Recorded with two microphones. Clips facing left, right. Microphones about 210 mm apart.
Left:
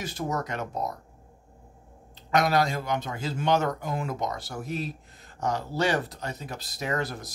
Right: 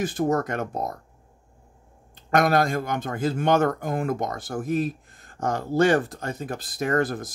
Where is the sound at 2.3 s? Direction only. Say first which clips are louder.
Right 3 dB; 50° right (ahead or behind).